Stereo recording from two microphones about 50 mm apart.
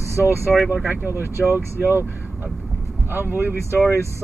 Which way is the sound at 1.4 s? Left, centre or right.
Right.